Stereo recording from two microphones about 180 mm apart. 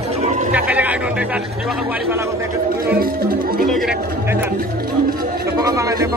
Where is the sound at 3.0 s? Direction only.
55° right (ahead or behind).